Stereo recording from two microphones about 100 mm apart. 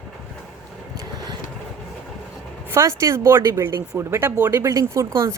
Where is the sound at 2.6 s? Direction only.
25° right (ahead or behind).